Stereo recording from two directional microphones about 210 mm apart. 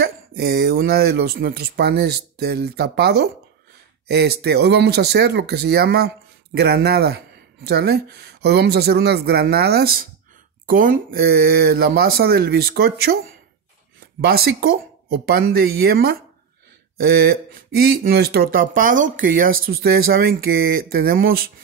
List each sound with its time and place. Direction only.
0.0 s speech: 50° right (ahead or behind)